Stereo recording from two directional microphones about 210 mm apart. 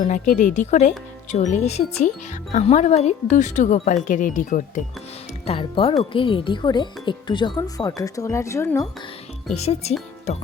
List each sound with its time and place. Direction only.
0.0 s speech: 35° left (ahead or behind)
5.5 s speech: 25° left (ahead or behind)
9.6 s speech: 30° left (ahead or behind)